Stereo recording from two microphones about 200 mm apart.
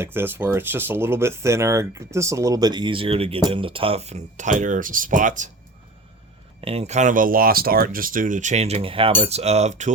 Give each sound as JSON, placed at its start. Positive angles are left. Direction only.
{"t": 0.0, "sound": "speech", "side_deg": -10}
{"t": 6.6, "sound": "speech", "side_deg": -30}